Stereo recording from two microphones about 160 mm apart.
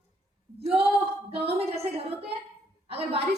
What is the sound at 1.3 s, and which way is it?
A woman's voice, 40° right (ahead or behind).